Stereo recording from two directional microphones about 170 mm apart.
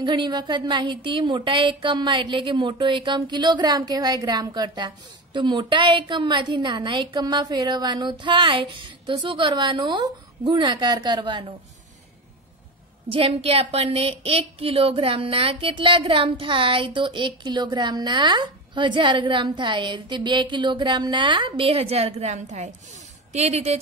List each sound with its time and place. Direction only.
0.0 s a woman's voice: 25° right (ahead or behind)
13.1 s a woman's voice: 35° right (ahead or behind)